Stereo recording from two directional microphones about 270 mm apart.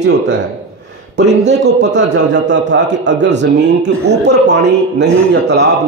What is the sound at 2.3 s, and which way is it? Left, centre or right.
A man's voice, right.